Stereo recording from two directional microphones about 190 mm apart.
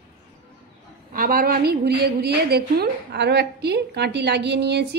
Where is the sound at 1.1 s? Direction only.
50° right (ahead or behind).